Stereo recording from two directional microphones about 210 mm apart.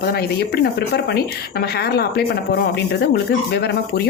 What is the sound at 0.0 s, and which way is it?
A woman's voice, 50° left (ahead or behind).